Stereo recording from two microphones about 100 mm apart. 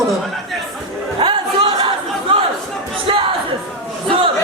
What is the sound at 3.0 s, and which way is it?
Music, 65° right (ahead or behind).